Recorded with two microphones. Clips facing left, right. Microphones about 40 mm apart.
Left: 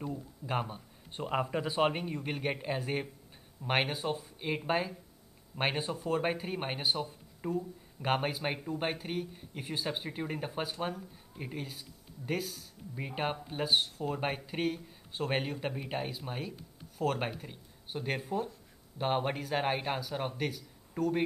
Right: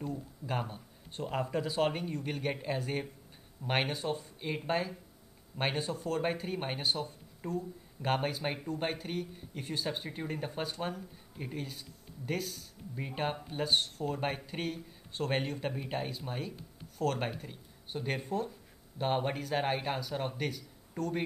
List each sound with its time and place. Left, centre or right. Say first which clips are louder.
0.0 s speech: even; centre